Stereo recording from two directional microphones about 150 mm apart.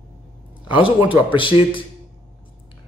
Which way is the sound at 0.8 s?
35° left (ahead or behind).